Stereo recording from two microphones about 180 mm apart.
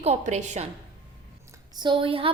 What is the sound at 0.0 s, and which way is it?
Speech, 40° right (ahead or behind).